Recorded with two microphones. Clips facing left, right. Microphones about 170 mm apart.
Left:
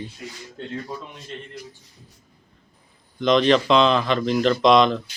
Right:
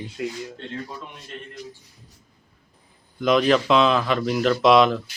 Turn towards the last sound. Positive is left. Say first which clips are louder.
# even
turn(degrees=-5)  # may be behind; listen again after turning